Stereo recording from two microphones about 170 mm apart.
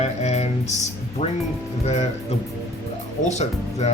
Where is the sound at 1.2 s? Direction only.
45° left (ahead or behind).